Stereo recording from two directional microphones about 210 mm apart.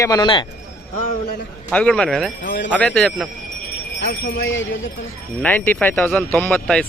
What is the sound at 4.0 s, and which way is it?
Speech, 60° left (ahead or behind).